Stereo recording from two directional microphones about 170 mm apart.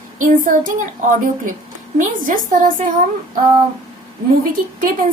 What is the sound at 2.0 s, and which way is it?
Speech, 50° right (ahead or behind).